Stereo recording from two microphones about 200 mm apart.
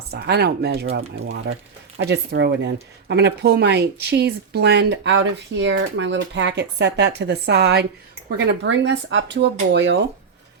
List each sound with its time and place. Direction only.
0.1 s speech: 55° right (ahead or behind)
0.9 s speech: 65° right (ahead or behind)